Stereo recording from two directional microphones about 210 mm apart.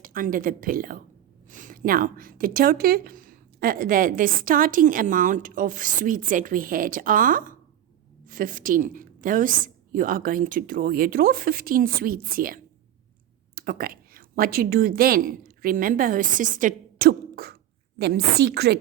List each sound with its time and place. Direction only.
0.0 s speech: 40° right (ahead or behind)
13.6 s a woman's voice: 45° right (ahead or behind)